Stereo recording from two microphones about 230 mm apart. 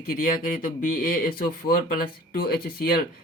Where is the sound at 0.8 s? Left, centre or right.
Left.